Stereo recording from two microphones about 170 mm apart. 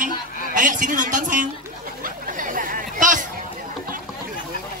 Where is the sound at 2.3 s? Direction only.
55° right (ahead or behind).